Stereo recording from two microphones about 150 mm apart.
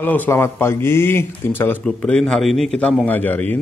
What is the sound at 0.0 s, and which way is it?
A man's voice, 10° left (ahead or behind).